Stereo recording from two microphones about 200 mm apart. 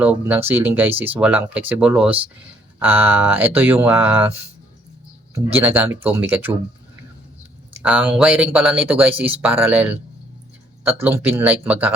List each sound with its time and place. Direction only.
0.0 s speech: 10° right (ahead or behind)
5.5 s speech: 10° right (ahead or behind)
7.7 s speech: 5° right (ahead or behind)
11.0 s speech: 10° right (ahead or behind)